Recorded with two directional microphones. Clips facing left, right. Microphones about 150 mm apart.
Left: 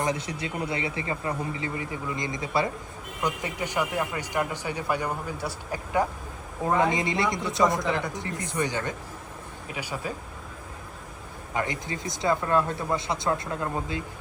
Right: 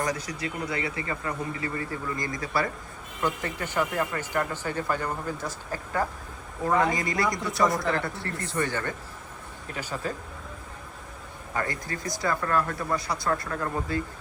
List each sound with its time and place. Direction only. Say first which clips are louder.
0.0 s speech: left 1 dB; 25° left (ahead or behind)
11.5 s speech: left 1 dB; 20° left (ahead or behind)